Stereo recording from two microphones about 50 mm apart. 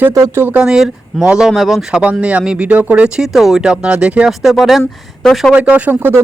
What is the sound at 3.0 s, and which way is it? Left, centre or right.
Speech, centre.